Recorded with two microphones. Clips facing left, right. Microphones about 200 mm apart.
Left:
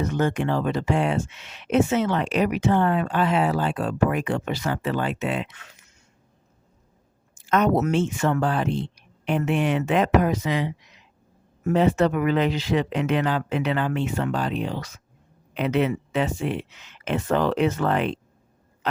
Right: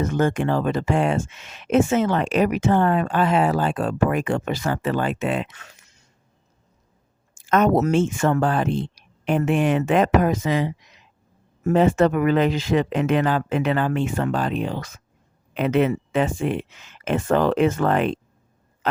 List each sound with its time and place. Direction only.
0.0 s speech: 50° right (ahead or behind)
7.3 s speech: 50° right (ahead or behind)